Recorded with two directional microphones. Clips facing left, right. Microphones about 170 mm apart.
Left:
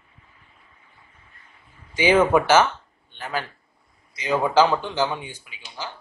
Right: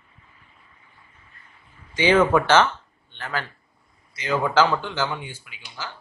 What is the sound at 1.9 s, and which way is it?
A man's voice, 10° left (ahead or behind).